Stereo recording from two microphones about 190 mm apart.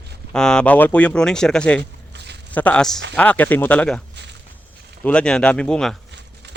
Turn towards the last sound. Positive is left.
turn(degrees=-65)  # may be behind; listen again after turning